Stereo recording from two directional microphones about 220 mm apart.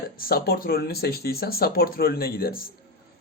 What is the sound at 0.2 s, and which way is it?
Speech, 45° left (ahead or behind).